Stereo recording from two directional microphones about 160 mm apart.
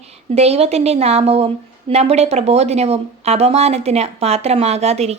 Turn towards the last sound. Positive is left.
turn(degrees=-40)  # may be behind; listen again after turning